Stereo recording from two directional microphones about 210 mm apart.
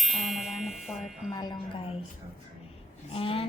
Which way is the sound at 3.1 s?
25° left (ahead or behind).